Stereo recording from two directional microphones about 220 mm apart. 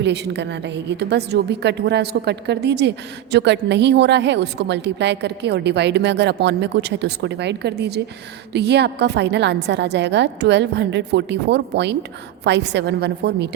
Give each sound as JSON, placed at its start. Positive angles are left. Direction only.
{"t": 0.0, "sound": "a woman's voice", "side_deg": -50}